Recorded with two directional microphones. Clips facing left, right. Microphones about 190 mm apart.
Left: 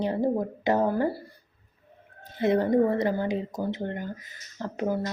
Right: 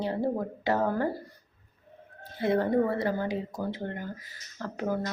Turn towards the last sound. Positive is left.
turn(degrees=20)  # may be behind; listen again after turning